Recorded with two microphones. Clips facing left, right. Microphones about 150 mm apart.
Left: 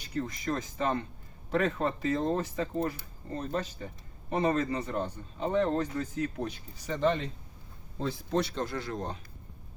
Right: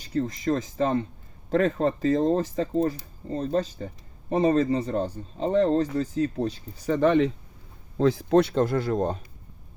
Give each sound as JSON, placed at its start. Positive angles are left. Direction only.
{"t": 0.1, "sound": "speech", "side_deg": -35}
{"t": 6.8, "sound": "speech", "side_deg": -55}
{"t": 7.9, "sound": "speech", "side_deg": -90}
{"t": 8.4, "sound": "speech", "side_deg": -50}